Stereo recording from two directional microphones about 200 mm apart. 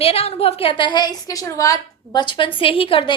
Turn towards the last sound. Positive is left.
turn(degrees=25)  # may be behind; listen again after turning